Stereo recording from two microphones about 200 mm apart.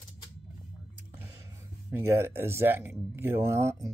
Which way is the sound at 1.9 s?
10° right (ahead or behind).